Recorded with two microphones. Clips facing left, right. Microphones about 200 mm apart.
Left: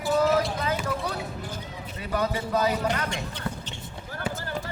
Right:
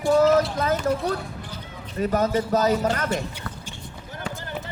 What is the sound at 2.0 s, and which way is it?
A man's voice, 45° right (ahead or behind).